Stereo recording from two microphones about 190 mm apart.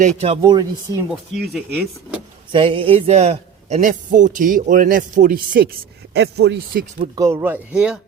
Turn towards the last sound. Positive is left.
turn(degrees=-5)  # may be behind; listen again after turning